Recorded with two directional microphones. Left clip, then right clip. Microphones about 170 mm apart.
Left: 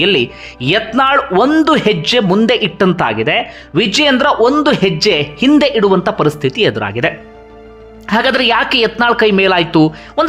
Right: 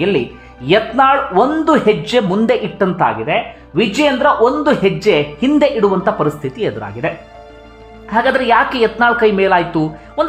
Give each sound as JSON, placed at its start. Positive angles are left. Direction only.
{"t": 0.6, "sound": "speech", "side_deg": 20}
{"t": 4.5, "sound": "speech", "side_deg": 15}